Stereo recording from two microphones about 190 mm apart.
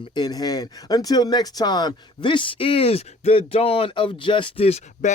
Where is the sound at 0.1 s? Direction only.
20° left (ahead or behind).